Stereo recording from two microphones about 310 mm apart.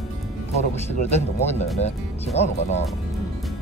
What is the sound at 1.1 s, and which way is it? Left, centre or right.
Speech, left.